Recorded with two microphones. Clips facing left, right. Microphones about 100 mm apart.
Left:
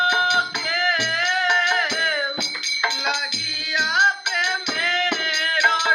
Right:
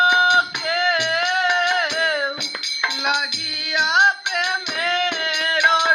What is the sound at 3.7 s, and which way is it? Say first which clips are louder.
Music: right 2 dB; 15° right (ahead or behind).